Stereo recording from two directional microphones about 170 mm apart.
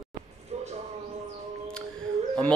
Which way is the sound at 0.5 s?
40° right (ahead or behind).